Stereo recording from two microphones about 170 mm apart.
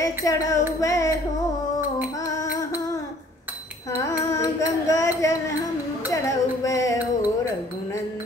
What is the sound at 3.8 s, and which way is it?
Child singing, 20° left (ahead or behind).